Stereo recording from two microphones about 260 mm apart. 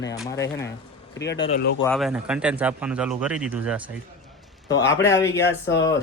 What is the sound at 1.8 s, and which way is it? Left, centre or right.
Speech, centre.